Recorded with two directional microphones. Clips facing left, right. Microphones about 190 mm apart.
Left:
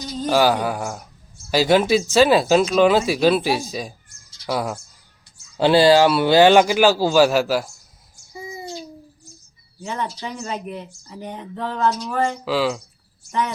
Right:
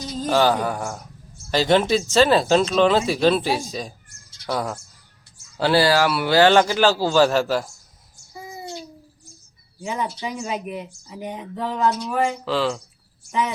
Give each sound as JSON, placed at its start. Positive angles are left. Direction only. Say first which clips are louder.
{"t": 0.2, "sound": "speech", "louder": "left 1 dB", "side_deg": 10}
{"t": 5.5, "sound": "speech", "louder": "left 4 dB", "side_deg": 20}
{"t": 9.8, "sound": "speech", "louder": "right 1 dB", "side_deg": -10}
{"t": 12.5, "sound": "speech", "louder": "left 2 dB", "side_deg": 5}